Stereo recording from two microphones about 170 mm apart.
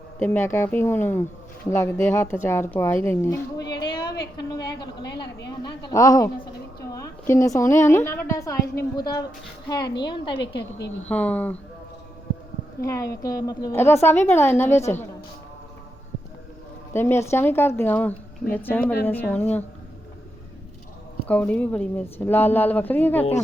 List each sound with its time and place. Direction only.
0.2 s a woman's voice: 15° left (ahead or behind)
3.7 s a sound: 25° left (ahead or behind)
4.6 s a woman's voice: 25° left (ahead or behind)
10.3 s a woman's voice: 85° left
11.1 s a woman's voice: 10° left (ahead or behind)
12.8 s a woman's voice: 20° left (ahead or behind)
16.9 s a woman's voice: 15° left (ahead or behind)
21.2 s a woman's voice: 10° left (ahead or behind)